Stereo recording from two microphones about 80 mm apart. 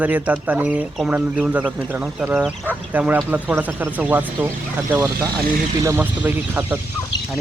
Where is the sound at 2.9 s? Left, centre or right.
Right.